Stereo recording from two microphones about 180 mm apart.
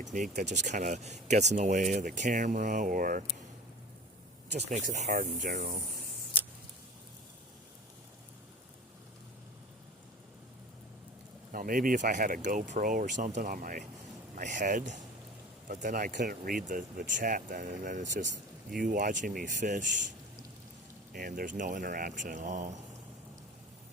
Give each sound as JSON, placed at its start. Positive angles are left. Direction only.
{"t": 0.0, "sound": "speech", "side_deg": -40}
{"t": 4.7, "sound": "speech", "side_deg": -40}
{"t": 11.5, "sound": "speech", "side_deg": -50}
{"t": 21.1, "sound": "speech", "side_deg": -50}